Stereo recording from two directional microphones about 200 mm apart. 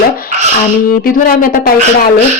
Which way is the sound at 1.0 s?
45° left (ahead or behind).